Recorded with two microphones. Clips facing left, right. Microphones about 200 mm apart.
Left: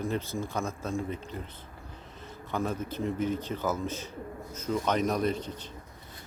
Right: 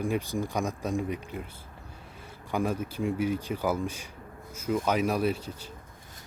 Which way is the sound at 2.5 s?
10° right (ahead or behind).